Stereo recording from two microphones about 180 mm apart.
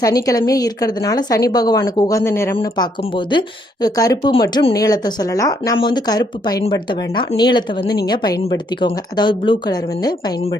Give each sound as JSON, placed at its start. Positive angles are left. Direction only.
{"t": 0.0, "sound": "a woman's voice", "side_deg": 20}